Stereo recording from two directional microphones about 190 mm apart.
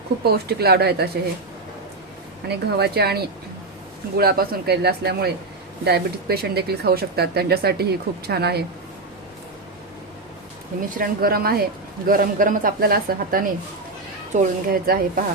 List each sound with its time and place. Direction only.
0.3 s speech: 55° right (ahead or behind)
2.5 s speech: 60° right (ahead or behind)
4.2 s speech: 55° right (ahead or behind)
10.9 s speech: 50° right (ahead or behind)